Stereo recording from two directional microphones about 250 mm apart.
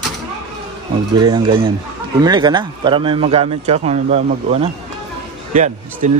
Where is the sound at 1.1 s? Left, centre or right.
Centre.